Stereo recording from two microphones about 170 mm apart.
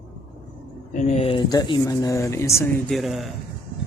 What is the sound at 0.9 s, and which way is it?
Speech, 40° left (ahead or behind).